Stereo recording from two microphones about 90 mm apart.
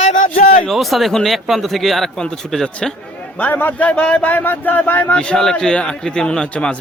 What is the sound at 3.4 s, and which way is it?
Speech, 20° left (ahead or behind).